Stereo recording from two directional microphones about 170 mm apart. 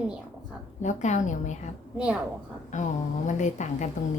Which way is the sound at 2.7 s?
45° left (ahead or behind).